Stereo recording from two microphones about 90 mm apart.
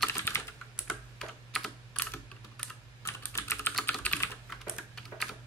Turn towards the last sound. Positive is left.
turn(degrees=5)  # may be behind; listen again after turning